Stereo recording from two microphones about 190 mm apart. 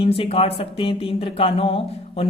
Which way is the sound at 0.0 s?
30° left (ahead or behind).